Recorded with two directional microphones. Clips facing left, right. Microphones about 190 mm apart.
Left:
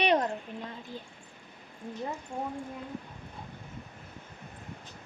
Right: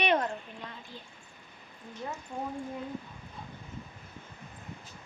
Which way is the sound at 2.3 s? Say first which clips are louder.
Even; 10° left (ahead or behind).